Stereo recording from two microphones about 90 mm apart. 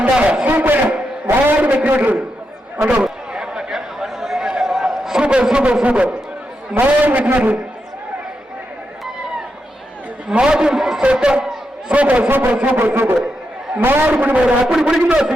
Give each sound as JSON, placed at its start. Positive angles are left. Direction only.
{"t": 0.0, "sound": "a sound", "side_deg": -15}
{"t": 1.3, "sound": "a man's voice", "side_deg": -20}
{"t": 2.7, "sound": "chatter", "side_deg": -10}
{"t": 6.7, "sound": "a man's voice", "side_deg": -15}
{"t": 10.2, "sound": "a man's voice", "side_deg": -10}